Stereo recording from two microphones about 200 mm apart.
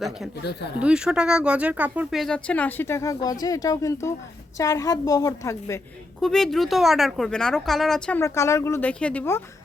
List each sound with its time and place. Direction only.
0.8 s a woman's voice: 5° right (ahead or behind); by 5.8 s 15° left (ahead or behind)
6.2 s speech: centre (ahead or behind)